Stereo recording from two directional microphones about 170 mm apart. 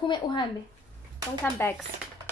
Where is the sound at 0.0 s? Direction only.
25° left (ahead or behind).